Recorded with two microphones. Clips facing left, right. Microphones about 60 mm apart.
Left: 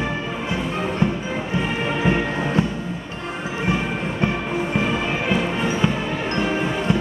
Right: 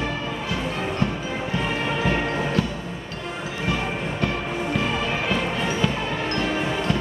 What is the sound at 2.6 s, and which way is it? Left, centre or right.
Music, left.